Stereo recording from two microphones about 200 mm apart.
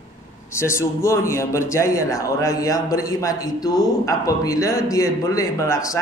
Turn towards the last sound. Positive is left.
turn(degrees=15)  # may be behind; listen again after turning